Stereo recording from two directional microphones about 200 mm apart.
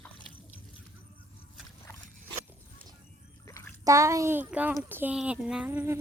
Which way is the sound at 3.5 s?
15° left (ahead or behind).